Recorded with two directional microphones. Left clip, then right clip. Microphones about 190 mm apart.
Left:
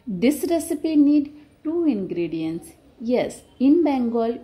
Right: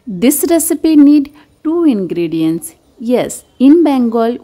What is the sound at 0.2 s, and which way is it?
A woman's voice, 40° right (ahead or behind).